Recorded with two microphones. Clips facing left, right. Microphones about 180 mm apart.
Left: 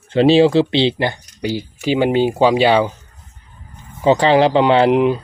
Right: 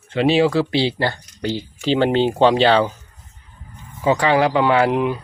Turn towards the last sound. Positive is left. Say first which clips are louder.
# left 4 dB
turn(degrees=20)  # may be behind; listen again after turning